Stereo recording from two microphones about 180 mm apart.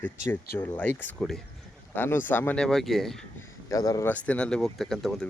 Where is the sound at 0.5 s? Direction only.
10° left (ahead or behind).